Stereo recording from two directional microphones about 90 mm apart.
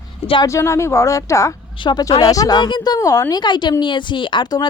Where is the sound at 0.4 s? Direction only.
35° left (ahead or behind).